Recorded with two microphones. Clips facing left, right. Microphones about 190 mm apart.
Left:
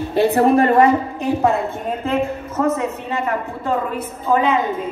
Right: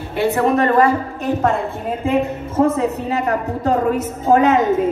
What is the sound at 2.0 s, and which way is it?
Speech, 15° right (ahead or behind).